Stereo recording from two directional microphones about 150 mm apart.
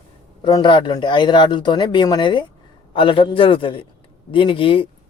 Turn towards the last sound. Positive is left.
turn(degrees=35)  # may be behind; listen again after turning